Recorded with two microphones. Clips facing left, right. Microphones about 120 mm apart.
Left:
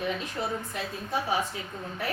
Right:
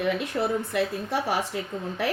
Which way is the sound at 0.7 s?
75° right (ahead or behind).